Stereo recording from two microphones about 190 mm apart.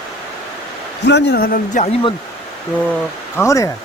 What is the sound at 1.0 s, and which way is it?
Speech, 65° left (ahead or behind).